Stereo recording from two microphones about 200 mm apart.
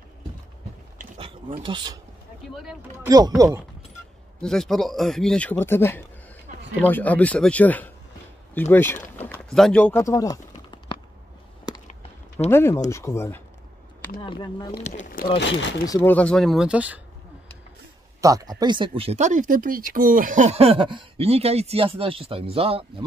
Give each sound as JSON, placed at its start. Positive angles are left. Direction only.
{"t": 0.9, "sound": "a sound", "side_deg": -30}
{"t": 1.6, "sound": "speech", "side_deg": -25}
{"t": 2.5, "sound": "speech", "side_deg": 0}
{"t": 3.1, "sound": "speech", "side_deg": -20}
{"t": 4.4, "sound": "speech", "side_deg": 5}
{"t": 8.5, "sound": "a sound", "side_deg": 10}
{"t": 11.9, "sound": "a sound", "side_deg": 30}
{"t": 12.4, "sound": "speech", "side_deg": 10}
{"t": 14.2, "sound": "speech", "side_deg": 25}
{"t": 14.8, "sound": "speech", "side_deg": 40}
{"t": 15.8, "sound": "speech", "side_deg": 15}
{"t": 18.2, "sound": "speech", "side_deg": -20}